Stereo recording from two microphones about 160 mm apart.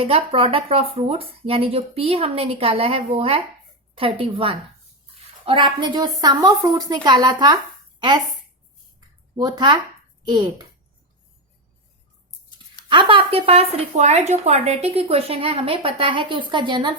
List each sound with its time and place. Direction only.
0.0 s a woman's voice: 35° right (ahead or behind)
9.3 s a woman's voice: 25° right (ahead or behind)
12.9 s a woman's voice: 30° right (ahead or behind)